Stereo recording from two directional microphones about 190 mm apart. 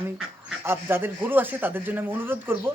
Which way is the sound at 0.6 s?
10° right (ahead or behind).